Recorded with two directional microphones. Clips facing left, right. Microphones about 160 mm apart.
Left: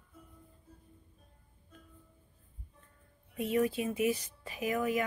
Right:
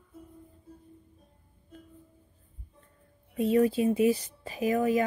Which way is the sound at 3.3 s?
30° right (ahead or behind).